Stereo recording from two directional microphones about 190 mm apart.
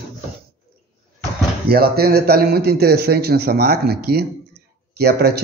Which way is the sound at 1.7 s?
55° right (ahead or behind).